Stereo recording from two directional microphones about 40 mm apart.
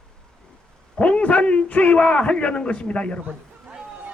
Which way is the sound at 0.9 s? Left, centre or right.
Left.